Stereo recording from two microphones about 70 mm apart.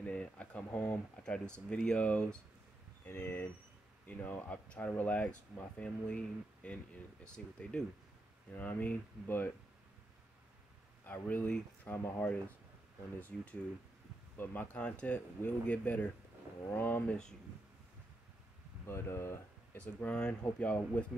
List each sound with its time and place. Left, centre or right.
0.0 s speech: centre
3.1 s speech: left; by 7.8 s centre
8.5 s speech: left
11.1 s speech: left
12.0 s speech: left
13.3 s speech: centre
14.3 s speech: left
17.1 s speech: centre
18.9 s speech: left
19.8 s speech: centre